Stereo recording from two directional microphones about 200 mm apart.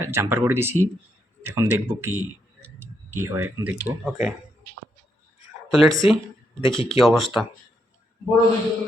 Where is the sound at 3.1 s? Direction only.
10° right (ahead or behind).